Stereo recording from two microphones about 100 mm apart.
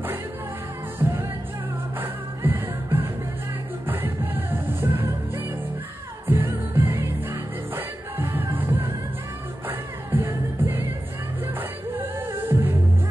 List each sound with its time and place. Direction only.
1.0 s music: 35° right (ahead or behind)
2.0 s music: 20° right (ahead or behind)
12.0 s music: 20° right (ahead or behind)